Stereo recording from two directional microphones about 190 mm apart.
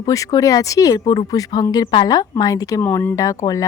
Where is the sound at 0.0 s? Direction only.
15° left (ahead or behind).